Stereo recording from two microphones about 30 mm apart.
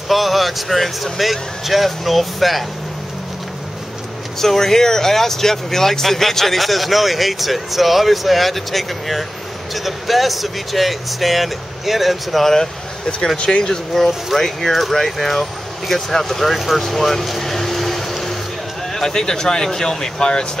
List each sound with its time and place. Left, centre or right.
0.1 s speech: centre
4.4 s speech: centre
13.4 s speech: left
14.0 s speech: centre
16.5 s vehicle: centre
19.0 s speech: left